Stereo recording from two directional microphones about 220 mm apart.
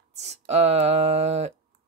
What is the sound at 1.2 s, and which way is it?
Speech, 30° right (ahead or behind).